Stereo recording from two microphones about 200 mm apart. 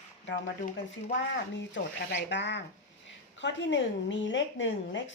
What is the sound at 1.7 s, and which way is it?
Speech, 60° left (ahead or behind).